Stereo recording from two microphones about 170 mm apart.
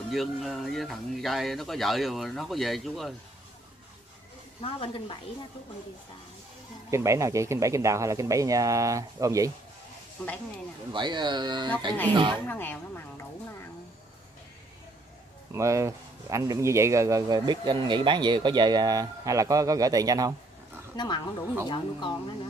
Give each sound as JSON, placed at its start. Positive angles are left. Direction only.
{"t": 0.1, "sound": "speech", "side_deg": 0}
{"t": 4.6, "sound": "a woman's voice", "side_deg": 35}
{"t": 6.9, "sound": "a man's voice", "side_deg": -15}
{"t": 10.9, "sound": "a man's voice", "side_deg": -25}
{"t": 12.4, "sound": "speech", "side_deg": 10}
{"t": 15.5, "sound": "a man's voice", "side_deg": -20}
{"t": 20.9, "sound": "speech", "side_deg": 25}